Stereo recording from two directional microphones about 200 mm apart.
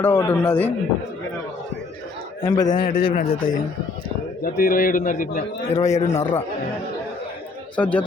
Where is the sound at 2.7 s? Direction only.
40° left (ahead or behind).